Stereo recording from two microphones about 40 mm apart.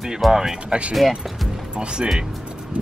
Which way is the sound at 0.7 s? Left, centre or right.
Right.